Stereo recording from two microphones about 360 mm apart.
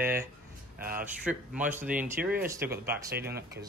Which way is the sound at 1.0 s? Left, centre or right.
Centre.